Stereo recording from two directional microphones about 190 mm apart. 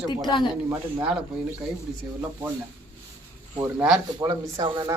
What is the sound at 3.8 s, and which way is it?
Speech, 5° right (ahead or behind).